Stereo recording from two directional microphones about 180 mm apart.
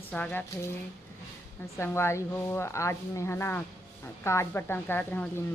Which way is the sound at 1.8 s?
15° left (ahead or behind).